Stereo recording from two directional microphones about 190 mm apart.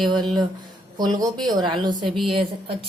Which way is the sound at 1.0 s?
20° right (ahead or behind).